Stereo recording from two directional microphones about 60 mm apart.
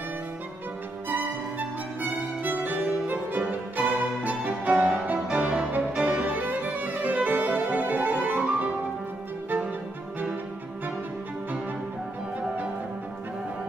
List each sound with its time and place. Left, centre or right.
1.0 s music: right